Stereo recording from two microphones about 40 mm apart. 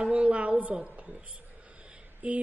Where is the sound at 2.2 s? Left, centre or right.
Right.